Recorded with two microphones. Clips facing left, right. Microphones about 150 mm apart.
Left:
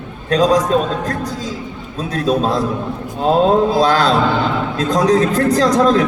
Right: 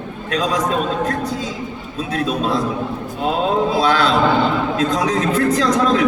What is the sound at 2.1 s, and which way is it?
Speech, 40° left (ahead or behind).